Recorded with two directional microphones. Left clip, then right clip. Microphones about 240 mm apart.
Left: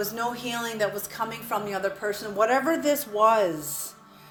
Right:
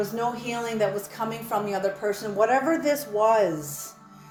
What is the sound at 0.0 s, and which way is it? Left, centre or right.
A woman's voice, left.